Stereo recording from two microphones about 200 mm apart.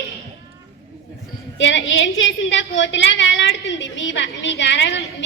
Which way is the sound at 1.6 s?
65° left (ahead or behind).